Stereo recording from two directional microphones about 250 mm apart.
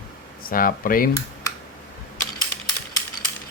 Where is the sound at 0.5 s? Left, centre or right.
Left.